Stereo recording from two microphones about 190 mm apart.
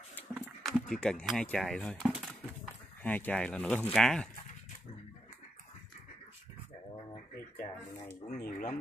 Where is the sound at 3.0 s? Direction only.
10° left (ahead or behind).